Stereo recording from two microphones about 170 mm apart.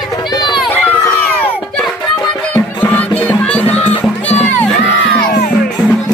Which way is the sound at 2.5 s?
10° left (ahead or behind).